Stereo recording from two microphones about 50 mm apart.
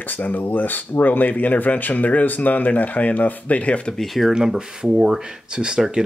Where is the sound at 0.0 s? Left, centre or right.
Left.